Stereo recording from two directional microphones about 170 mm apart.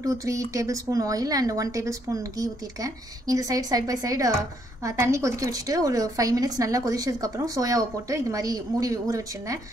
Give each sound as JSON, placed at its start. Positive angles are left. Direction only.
{"t": 0.0, "sound": "a woman's voice", "side_deg": -20}